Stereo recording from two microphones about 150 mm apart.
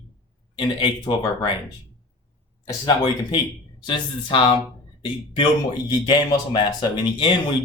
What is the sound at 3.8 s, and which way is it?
Speech, 35° left (ahead or behind).